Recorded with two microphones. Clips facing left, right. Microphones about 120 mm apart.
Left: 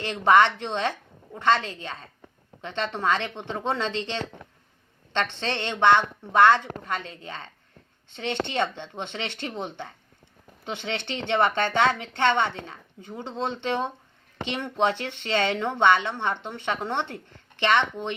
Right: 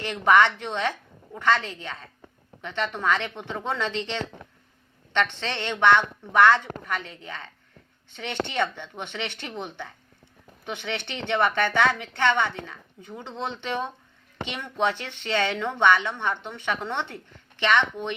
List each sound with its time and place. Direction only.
0.0 s a woman's voice: 25° left (ahead or behind)